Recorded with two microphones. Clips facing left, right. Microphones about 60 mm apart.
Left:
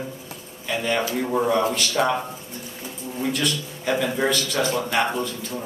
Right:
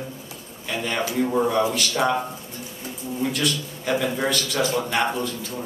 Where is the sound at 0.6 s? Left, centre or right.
Centre.